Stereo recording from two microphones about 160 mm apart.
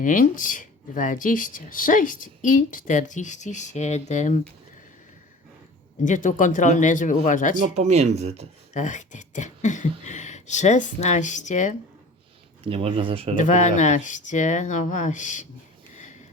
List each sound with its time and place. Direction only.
0.0 s speech: 55° left (ahead or behind)
6.0 s speech: 55° left (ahead or behind)
7.8 s speech: 45° right (ahead or behind)
8.7 s speech: 50° left (ahead or behind)
12.6 s speech: 35° right (ahead or behind)
13.3 s speech: 50° left (ahead or behind)